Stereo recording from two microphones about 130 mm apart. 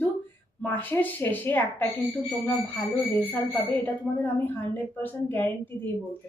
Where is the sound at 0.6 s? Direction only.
15° left (ahead or behind).